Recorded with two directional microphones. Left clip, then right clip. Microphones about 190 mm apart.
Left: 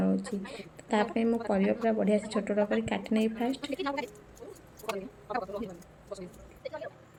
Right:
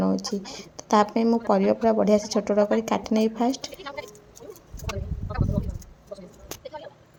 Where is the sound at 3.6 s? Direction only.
45° left (ahead or behind).